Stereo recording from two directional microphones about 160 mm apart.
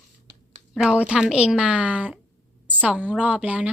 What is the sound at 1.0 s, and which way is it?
A woman's voice, 5° right (ahead or behind).